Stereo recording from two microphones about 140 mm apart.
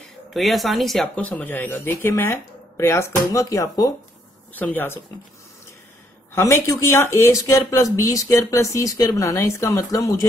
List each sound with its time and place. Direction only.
0.3 s speech: centre (ahead or behind)
6.3 s speech: 20° left (ahead or behind)